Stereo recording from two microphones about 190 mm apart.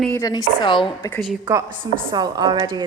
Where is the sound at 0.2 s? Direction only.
20° left (ahead or behind).